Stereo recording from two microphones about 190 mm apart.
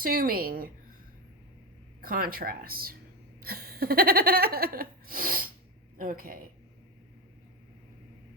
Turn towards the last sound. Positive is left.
turn(degrees=-50)  # may be behind; listen again after turning